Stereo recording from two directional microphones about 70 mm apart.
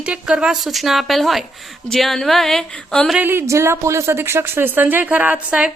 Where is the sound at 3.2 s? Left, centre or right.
Right.